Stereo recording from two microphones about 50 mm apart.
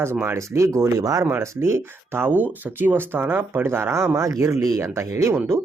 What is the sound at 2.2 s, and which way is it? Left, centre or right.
Speech, right.